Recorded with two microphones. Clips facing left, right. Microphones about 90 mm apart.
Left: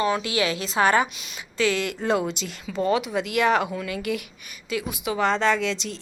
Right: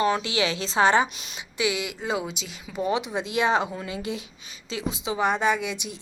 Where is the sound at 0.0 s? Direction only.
30° right (ahead or behind).